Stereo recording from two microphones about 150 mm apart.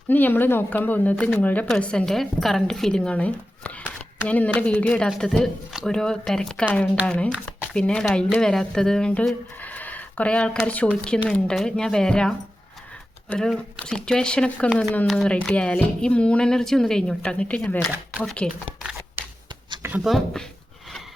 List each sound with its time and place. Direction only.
0.1 s speech: 15° left (ahead or behind)
18.8 s a sound: 5° right (ahead or behind)
20.1 s speech: 5° left (ahead or behind)